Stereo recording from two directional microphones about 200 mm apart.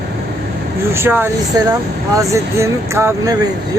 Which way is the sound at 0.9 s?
10° right (ahead or behind).